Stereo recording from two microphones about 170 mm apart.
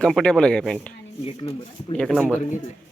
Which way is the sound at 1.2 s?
35° left (ahead or behind).